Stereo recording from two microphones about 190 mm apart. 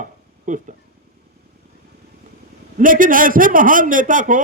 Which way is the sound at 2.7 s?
45° right (ahead or behind).